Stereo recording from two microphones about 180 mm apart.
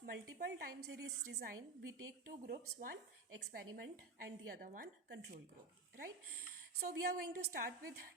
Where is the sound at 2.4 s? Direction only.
50° right (ahead or behind).